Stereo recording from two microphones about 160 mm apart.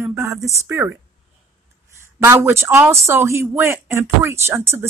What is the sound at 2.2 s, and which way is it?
Speech, 15° right (ahead or behind).